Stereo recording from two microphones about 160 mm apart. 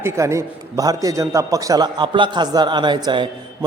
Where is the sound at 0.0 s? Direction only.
20° right (ahead or behind).